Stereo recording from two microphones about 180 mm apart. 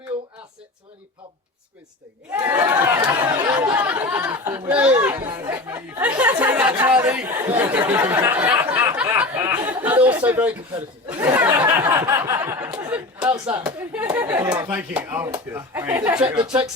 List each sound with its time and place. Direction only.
2.3 s chatter: 20° right (ahead or behind)
3.6 s chatter: 10° right (ahead or behind)
5.5 s a sound: 10° right (ahead or behind)
6.8 s chatter: 10° right (ahead or behind)
9.0 s a sound: 10° right (ahead or behind)
13.3 s speech: 15° right (ahead or behind)